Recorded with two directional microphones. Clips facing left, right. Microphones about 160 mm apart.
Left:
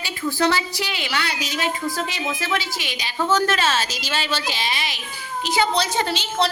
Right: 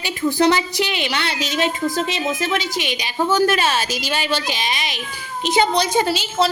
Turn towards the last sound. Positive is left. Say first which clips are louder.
# right 4 dB
turn(degrees=-10)  # may be behind; listen again after turning